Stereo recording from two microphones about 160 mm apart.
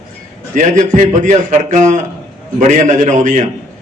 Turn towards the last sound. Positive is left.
turn(degrees=-50)  # may be behind; listen again after turning